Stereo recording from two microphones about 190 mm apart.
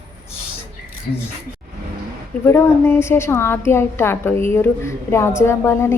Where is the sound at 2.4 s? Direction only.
10° left (ahead or behind).